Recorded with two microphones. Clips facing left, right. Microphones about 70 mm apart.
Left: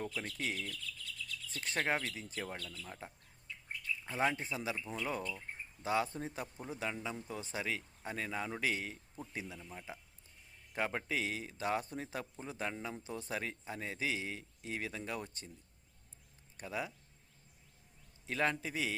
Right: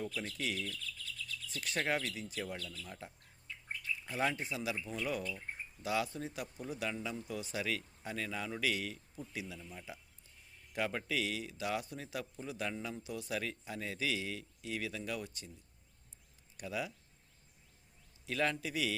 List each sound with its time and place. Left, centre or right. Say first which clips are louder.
0.1 s a man's voice: even; left
16.6 s a man's voice: right 1 dB; left
18.3 s a man's voice: even; left